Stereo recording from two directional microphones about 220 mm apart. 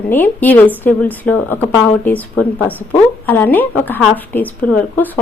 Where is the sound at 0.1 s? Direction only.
10° left (ahead or behind).